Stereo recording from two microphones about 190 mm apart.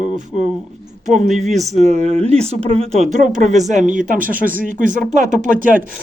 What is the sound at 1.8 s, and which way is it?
Speech, 35° right (ahead or behind).